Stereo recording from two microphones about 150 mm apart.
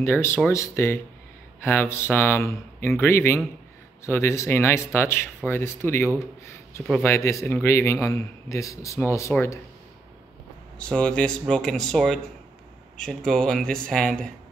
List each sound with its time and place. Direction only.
0.0 s a man's voice: 15° left (ahead or behind)
10.8 s speech: 5° left (ahead or behind)